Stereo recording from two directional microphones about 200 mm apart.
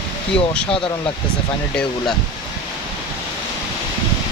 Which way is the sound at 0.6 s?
25° left (ahead or behind).